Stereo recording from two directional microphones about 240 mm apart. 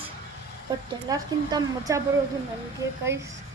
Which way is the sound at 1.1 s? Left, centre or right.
Centre.